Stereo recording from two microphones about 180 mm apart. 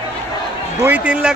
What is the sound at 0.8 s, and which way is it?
Speech, 10° right (ahead or behind).